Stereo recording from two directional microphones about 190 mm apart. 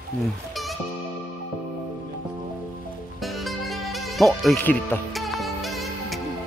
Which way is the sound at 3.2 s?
Centre (ahead or behind).